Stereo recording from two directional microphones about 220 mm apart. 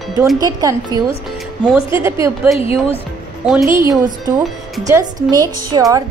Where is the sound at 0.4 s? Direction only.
15° right (ahead or behind).